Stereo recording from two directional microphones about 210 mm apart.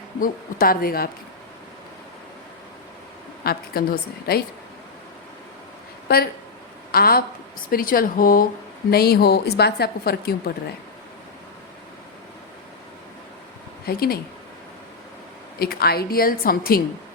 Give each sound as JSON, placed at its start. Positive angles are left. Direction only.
{"t": 0.2, "sound": "speech", "side_deg": 45}
{"t": 3.4, "sound": "speech", "side_deg": 45}
{"t": 6.9, "sound": "speech", "side_deg": 45}
{"t": 13.8, "sound": "speech", "side_deg": 45}
{"t": 15.5, "sound": "speech", "side_deg": 45}